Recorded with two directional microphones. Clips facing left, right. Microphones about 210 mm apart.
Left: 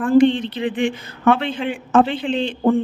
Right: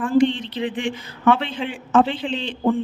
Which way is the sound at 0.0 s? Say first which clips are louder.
Left 4 dB; 55° left (ahead or behind).